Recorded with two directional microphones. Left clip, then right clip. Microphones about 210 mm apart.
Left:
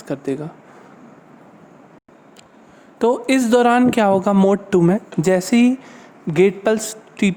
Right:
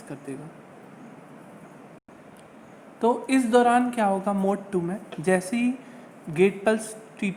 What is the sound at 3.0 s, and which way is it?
A woman's voice, 50° left (ahead or behind).